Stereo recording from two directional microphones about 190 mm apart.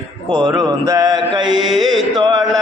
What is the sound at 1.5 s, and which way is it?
Music, centre (ahead or behind).